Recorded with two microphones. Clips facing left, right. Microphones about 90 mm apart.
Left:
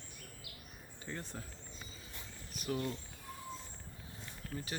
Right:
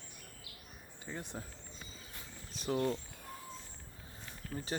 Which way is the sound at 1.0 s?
15° right (ahead or behind).